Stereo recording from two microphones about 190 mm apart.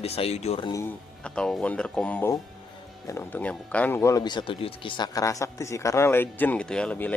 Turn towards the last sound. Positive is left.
turn(degrees=5)  # may be behind; listen again after turning